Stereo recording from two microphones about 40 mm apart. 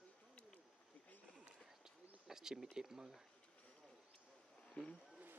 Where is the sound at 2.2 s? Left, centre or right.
Centre.